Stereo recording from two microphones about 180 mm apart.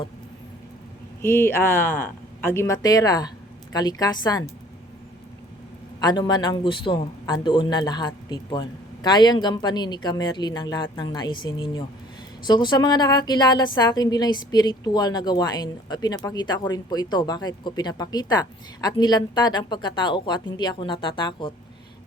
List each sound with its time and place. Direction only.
1.2 s a woman's voice: 15° left (ahead or behind)
6.0 s a woman's voice: 25° left (ahead or behind)